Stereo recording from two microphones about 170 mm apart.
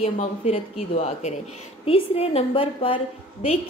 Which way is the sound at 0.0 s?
35° left (ahead or behind).